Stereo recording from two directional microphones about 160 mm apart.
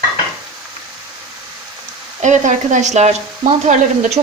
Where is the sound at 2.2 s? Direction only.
50° right (ahead or behind).